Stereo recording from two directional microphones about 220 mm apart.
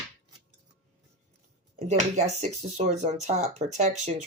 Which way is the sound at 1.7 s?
30° right (ahead or behind).